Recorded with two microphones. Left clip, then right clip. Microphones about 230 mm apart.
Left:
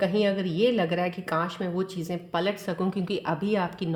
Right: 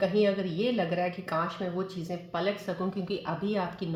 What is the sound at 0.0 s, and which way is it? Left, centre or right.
Speech, left.